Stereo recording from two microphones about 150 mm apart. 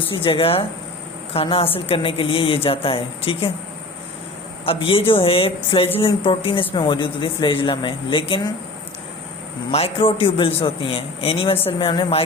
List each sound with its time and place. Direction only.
0.1 s speech: 35° left (ahead or behind)
4.6 s speech: 40° left (ahead or behind)
9.7 s speech: 40° left (ahead or behind)